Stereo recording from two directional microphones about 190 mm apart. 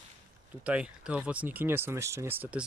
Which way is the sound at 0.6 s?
5° right (ahead or behind).